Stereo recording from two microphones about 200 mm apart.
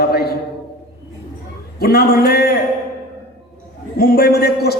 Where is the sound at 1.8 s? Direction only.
50° left (ahead or behind).